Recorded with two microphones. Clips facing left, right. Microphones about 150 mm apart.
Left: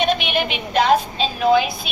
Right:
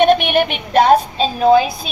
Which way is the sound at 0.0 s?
55° right (ahead or behind).